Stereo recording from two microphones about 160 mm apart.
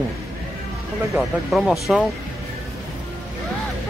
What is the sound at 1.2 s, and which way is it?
Speech, centre (ahead or behind).